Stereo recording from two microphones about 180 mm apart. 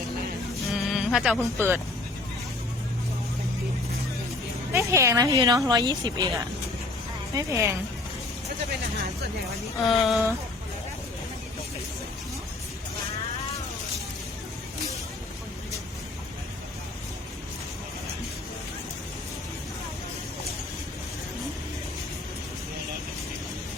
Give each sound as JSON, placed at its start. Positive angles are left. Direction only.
{"t": 0.7, "sound": "music", "side_deg": 0}
{"t": 1.4, "sound": "speech", "side_deg": -10}
{"t": 4.7, "sound": "speech", "side_deg": -15}
{"t": 9.8, "sound": "speech", "side_deg": 0}